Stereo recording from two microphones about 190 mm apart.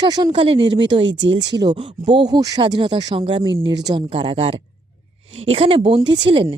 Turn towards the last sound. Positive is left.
turn(degrees=-25)  # may be behind; listen again after turning